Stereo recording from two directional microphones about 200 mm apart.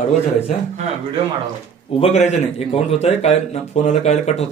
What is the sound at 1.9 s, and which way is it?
A man's voice, 30° left (ahead or behind).